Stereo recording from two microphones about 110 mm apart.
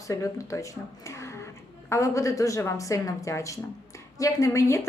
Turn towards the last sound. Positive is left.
turn(degrees=25)  # may be behind; listen again after turning